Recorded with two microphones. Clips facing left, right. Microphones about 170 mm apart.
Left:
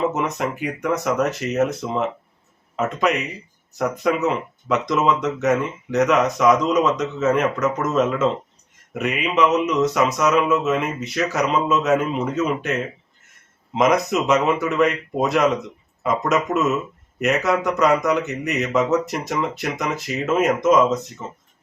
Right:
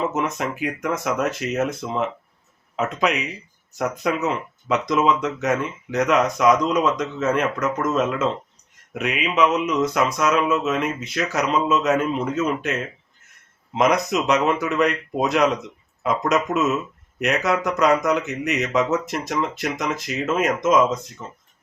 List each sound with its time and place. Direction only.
0.1 s speech: centre (ahead or behind)